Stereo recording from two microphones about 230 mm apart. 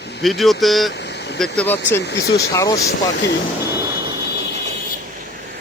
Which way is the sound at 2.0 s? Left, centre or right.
Left.